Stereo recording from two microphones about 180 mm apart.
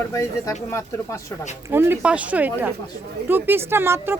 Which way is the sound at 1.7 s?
10° right (ahead or behind).